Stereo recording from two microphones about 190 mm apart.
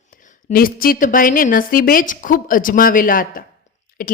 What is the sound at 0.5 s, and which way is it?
A woman's voice, 50° left (ahead or behind).